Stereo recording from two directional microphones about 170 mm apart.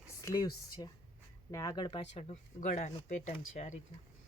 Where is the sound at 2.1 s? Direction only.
40° left (ahead or behind).